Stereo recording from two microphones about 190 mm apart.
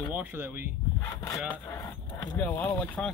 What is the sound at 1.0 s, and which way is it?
Speech, 15° left (ahead or behind).